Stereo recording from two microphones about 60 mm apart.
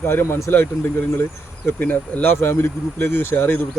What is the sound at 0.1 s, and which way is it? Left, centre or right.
Speech, left.